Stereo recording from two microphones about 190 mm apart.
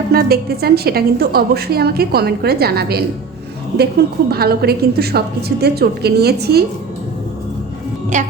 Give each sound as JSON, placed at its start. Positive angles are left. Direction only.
{"t": 0.1, "sound": "a woman's voice", "side_deg": -55}
{"t": 8.1, "sound": "a woman's voice", "side_deg": -40}